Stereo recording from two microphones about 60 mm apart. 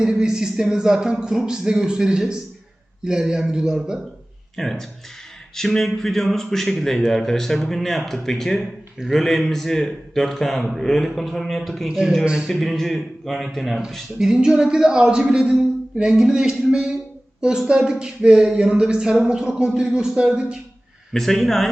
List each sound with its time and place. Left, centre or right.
0.0 s a man's voice: centre
4.5 s a man's voice: centre
5.5 s a sound: centre
5.9 s a man's voice: centre
12.2 s a man's voice: centre
12.5 s a man's voice: centre
21.1 s a man's voice: centre